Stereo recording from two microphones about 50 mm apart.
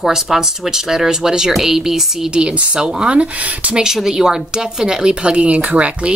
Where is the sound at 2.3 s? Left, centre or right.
Right.